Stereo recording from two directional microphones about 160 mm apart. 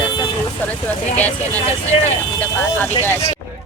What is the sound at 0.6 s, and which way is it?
Speech, 10° left (ahead or behind).